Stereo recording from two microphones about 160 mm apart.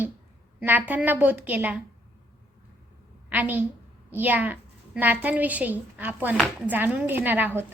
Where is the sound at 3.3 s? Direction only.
10° right (ahead or behind).